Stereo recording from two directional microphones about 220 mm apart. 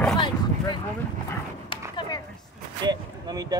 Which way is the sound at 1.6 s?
20° left (ahead or behind).